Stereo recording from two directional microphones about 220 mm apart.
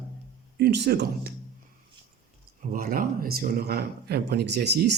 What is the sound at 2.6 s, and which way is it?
A man's voice, 40° right (ahead or behind).